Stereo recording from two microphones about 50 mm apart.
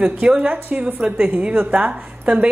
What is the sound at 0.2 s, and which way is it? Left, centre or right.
A woman's voice, right.